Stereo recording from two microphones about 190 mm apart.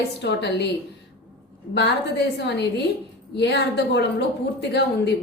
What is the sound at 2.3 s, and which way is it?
A woman's voice, 65° left (ahead or behind).